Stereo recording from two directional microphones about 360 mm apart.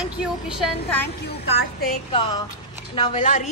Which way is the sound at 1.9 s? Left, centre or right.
Centre.